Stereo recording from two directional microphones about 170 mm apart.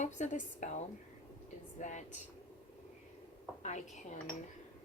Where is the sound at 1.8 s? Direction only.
45° left (ahead or behind).